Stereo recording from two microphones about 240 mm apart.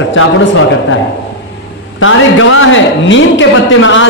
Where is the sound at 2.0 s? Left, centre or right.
Left.